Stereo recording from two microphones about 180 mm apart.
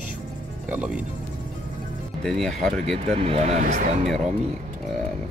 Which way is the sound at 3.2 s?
35° right (ahead or behind).